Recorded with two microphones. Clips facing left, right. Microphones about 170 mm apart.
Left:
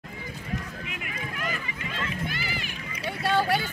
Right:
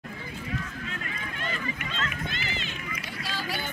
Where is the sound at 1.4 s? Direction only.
30° right (ahead or behind).